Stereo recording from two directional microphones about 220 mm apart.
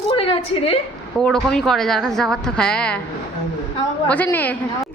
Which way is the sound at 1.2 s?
Centre (ahead or behind).